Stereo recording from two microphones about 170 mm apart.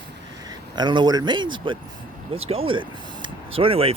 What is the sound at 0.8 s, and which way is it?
Speech, 25° right (ahead or behind).